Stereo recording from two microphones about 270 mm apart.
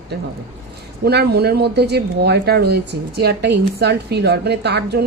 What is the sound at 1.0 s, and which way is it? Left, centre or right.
A woman's voice, right.